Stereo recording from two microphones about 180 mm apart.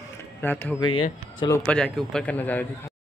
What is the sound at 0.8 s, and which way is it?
Speech, 25° left (ahead or behind).